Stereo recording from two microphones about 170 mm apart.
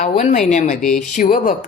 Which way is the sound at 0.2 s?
45° left (ahead or behind).